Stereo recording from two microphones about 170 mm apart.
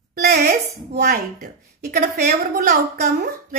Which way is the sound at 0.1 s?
75° right (ahead or behind).